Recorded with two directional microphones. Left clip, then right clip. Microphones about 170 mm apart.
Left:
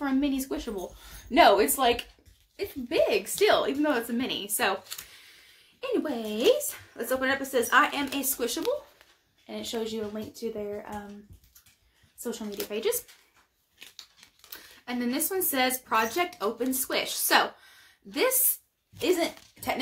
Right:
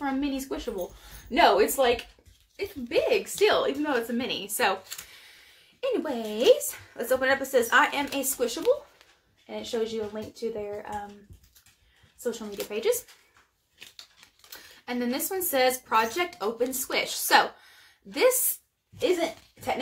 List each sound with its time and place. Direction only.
0.0 s a sound: 20° left (ahead or behind)
1.3 s a woman's voice: 15° left (ahead or behind)
9.5 s speech: 25° left (ahead or behind)
12.5 s a woman's voice: 15° left (ahead or behind)
14.5 s a woman's voice: 15° left (ahead or behind)